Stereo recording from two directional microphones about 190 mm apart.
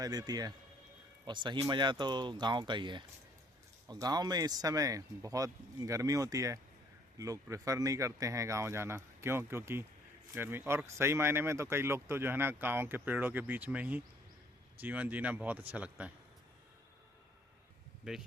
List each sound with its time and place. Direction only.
0.0 s speech: 20° right (ahead or behind)
18.0 s speech: 5° right (ahead or behind)